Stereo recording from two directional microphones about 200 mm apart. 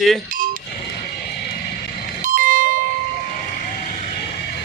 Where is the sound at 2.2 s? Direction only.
45° right (ahead or behind).